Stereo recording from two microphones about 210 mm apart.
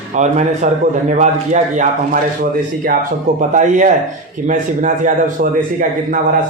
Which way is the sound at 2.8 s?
45° right (ahead or behind).